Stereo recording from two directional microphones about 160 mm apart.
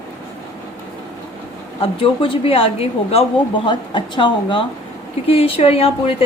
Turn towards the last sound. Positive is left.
turn(degrees=35)  # may be behind; listen again after turning